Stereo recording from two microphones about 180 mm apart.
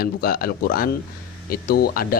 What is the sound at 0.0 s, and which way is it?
Speech, 55° left (ahead or behind).